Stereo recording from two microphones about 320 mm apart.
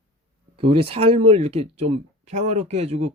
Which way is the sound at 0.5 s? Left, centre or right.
Centre.